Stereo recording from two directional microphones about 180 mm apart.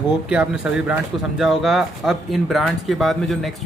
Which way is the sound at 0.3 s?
5° right (ahead or behind).